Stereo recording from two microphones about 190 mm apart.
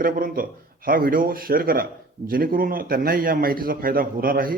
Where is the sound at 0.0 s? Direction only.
50° right (ahead or behind).